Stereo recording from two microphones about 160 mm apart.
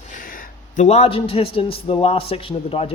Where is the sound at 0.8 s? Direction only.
40° left (ahead or behind).